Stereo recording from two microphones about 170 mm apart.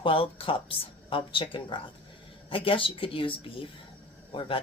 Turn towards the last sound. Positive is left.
turn(degrees=30)  # may be behind; listen again after turning